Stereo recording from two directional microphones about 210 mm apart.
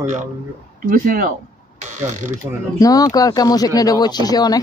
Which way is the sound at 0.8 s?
40° right (ahead or behind).